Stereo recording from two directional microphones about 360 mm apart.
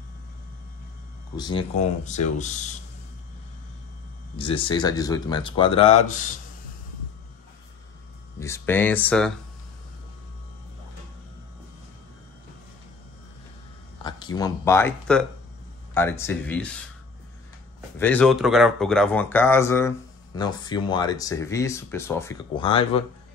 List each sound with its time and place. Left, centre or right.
1.3 s speech: centre
4.4 s speech: centre
8.4 s speech: centre
14.0 s speech: centre
17.9 s speech: centre